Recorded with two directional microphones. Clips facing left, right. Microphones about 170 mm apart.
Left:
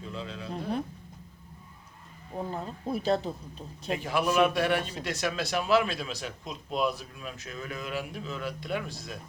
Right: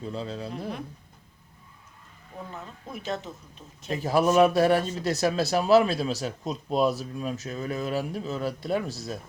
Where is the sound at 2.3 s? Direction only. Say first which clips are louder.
Left 5 dB; 35° left (ahead or behind).